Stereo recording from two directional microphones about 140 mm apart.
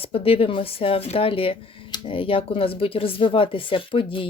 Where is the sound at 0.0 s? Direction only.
45° left (ahead or behind).